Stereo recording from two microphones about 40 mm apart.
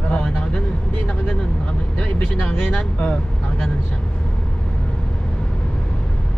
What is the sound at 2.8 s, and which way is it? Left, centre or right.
Speech, left.